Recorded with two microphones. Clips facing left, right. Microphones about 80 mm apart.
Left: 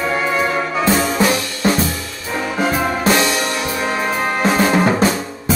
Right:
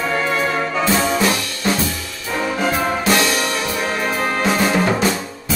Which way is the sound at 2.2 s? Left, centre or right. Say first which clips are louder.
Left 1 dB; centre.